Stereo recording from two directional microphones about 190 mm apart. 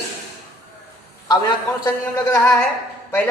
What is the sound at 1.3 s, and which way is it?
Speech, 20° left (ahead or behind).